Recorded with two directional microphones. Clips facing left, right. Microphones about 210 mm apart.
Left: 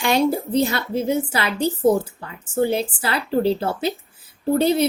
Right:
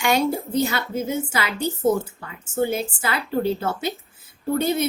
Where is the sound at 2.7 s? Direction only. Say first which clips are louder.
Left 3 dB; 35° left (ahead or behind).